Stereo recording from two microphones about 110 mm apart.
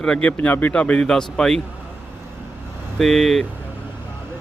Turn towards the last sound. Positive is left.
turn(degrees=0)  # may be behind; listen again after turning